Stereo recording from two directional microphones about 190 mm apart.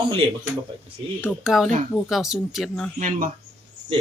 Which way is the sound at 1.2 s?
5° right (ahead or behind).